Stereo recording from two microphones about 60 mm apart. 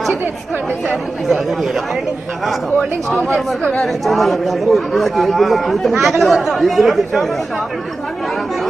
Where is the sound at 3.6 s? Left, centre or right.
Centre.